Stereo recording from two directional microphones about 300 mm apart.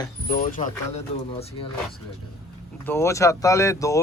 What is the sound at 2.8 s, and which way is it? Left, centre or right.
Speech, centre.